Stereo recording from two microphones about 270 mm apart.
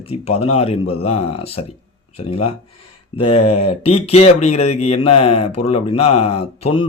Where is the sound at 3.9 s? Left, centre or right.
Left.